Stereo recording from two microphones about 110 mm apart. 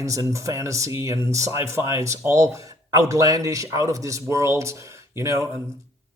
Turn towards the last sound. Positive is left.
turn(degrees=-25)  # may be behind; listen again after turning